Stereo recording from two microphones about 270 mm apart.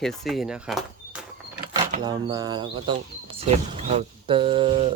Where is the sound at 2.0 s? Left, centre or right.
Centre.